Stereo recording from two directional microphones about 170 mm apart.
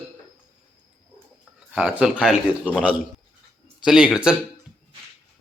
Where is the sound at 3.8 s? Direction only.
5° right (ahead or behind).